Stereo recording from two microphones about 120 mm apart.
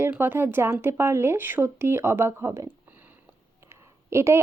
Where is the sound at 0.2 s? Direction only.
20° right (ahead or behind).